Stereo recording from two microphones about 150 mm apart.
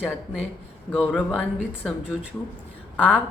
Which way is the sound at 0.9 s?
10° left (ahead or behind).